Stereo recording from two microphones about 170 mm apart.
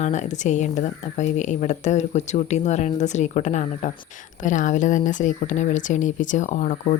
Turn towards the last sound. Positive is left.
turn(degrees=45)  # may be behind; listen again after turning